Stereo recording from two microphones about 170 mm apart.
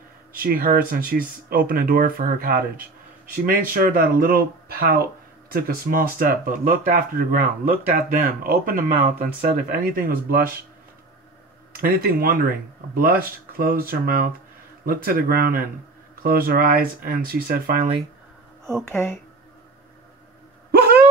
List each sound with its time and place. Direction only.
0.3 s speech: 60° right (ahead or behind)
11.7 s speech: 60° right (ahead or behind)
20.7 s a sound: 65° right (ahead or behind)